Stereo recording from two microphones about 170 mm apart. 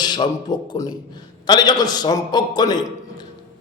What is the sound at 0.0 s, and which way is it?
A man's voice, 25° left (ahead or behind).